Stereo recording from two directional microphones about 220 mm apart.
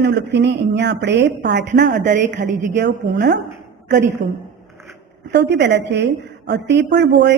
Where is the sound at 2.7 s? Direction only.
50° right (ahead or behind).